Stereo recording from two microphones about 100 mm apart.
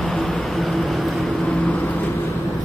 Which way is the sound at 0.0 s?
Centre (ahead or behind).